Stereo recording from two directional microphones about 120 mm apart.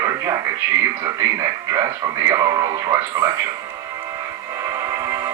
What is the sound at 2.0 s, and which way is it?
Speech, 40° right (ahead or behind).